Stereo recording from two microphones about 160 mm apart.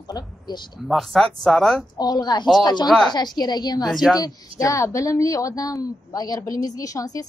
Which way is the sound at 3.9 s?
Centre (ahead or behind).